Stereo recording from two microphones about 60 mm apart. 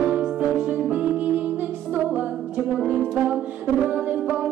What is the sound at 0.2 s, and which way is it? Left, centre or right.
Music, centre.